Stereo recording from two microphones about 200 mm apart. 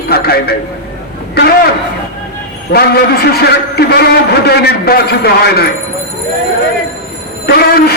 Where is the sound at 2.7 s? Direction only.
50° left (ahead or behind).